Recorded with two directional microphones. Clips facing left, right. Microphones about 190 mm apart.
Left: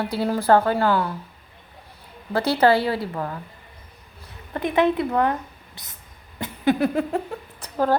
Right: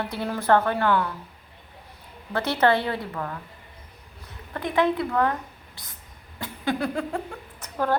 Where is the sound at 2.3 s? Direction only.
30° left (ahead or behind).